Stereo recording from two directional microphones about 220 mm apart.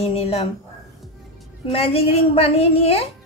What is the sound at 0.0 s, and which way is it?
Speech, 25° left (ahead or behind).